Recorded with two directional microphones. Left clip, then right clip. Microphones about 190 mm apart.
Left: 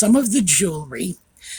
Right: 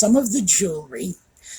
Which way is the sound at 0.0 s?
45° left (ahead or behind).